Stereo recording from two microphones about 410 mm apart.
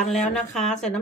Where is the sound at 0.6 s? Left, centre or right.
Centre.